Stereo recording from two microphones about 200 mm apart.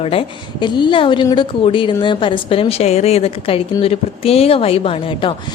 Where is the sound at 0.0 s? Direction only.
30° left (ahead or behind).